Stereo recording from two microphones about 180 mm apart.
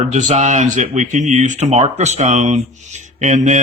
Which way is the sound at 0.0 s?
40° right (ahead or behind).